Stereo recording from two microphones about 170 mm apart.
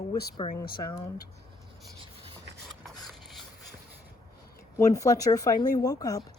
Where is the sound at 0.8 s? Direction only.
20° left (ahead or behind).